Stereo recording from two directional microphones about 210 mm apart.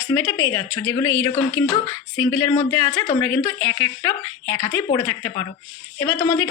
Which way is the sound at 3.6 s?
10° left (ahead or behind).